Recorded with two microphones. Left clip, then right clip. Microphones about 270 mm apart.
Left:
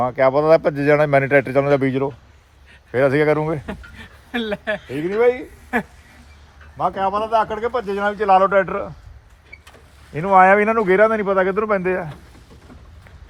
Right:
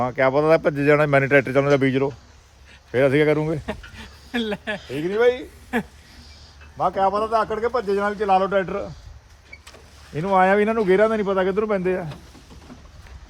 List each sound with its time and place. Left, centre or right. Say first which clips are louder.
0.0 s speech: left 3 dB; centre
6.7 s speech: even; left
8.2 s speech: left 7 dB; centre
10.2 s speech: left 5 dB; centre